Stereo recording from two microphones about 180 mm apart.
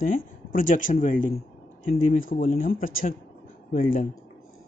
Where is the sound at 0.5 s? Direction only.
50° left (ahead or behind).